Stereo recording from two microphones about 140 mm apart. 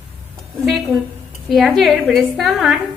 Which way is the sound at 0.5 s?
Centre (ahead or behind).